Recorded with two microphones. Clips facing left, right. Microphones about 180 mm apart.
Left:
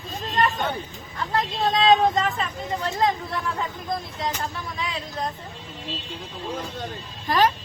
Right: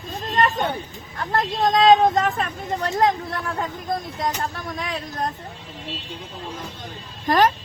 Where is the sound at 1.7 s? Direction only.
55° right (ahead or behind).